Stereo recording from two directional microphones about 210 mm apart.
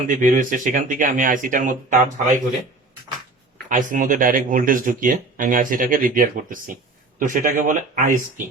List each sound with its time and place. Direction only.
0.1 s speech: 35° right (ahead or behind)
3.7 s speech: 40° right (ahead or behind)